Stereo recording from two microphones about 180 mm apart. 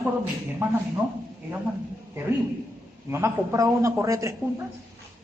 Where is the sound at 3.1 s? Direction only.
15° right (ahead or behind).